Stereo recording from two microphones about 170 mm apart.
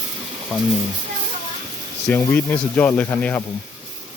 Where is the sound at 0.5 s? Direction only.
5° right (ahead or behind).